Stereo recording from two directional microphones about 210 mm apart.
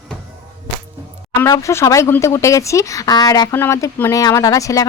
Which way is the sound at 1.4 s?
15° left (ahead or behind).